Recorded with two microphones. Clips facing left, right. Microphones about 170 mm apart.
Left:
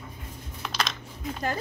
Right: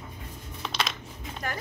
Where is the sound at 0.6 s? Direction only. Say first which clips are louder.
Even; centre (ahead or behind).